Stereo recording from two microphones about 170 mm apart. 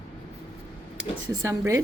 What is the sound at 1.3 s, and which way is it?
Speech, 15° right (ahead or behind).